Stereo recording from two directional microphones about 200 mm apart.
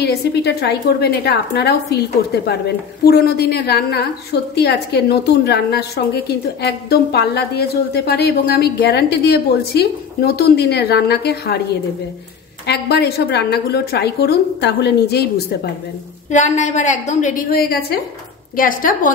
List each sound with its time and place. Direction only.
0.0 s a woman's voice: 55° left (ahead or behind)
3.1 s a woman's voice: 55° left (ahead or behind)
12.6 s a woman's voice: 55° left (ahead or behind)
16.3 s a woman's voice: 35° left (ahead or behind)